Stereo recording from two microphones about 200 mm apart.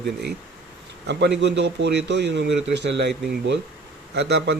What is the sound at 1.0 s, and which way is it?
A man's voice, 60° right (ahead or behind).